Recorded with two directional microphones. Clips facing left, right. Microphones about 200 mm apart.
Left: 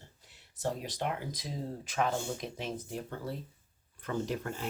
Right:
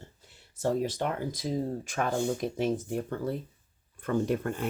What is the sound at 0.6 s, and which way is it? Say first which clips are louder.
Speech: right 6 dB; 45° right (ahead or behind).